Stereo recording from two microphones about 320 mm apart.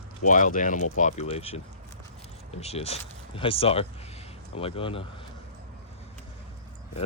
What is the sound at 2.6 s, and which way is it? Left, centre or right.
Speech, centre.